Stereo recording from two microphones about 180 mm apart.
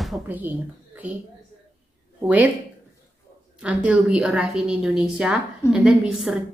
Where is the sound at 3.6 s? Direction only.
5° right (ahead or behind).